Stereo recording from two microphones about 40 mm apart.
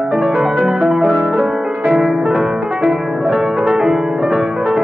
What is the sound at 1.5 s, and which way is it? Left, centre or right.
Music, centre.